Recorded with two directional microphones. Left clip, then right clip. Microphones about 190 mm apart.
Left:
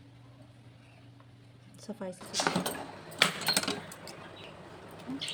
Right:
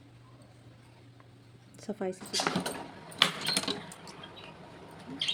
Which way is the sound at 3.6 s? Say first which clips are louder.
Even; 25° left (ahead or behind).